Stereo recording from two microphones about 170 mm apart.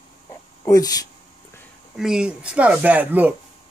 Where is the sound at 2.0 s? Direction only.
5° right (ahead or behind).